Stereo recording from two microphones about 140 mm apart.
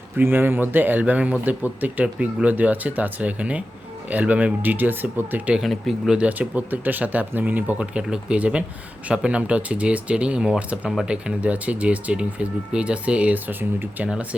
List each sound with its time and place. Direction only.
0.2 s speech: 15° right (ahead or behind)